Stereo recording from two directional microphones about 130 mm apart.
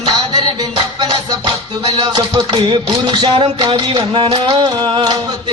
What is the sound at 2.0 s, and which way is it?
Music, 30° right (ahead or behind).